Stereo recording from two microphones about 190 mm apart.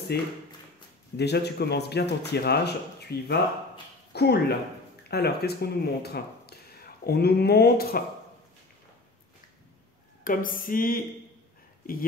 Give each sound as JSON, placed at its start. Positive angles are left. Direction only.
{"t": 0.1, "sound": "a man's voice", "side_deg": 60}
{"t": 10.2, "sound": "speech", "side_deg": 45}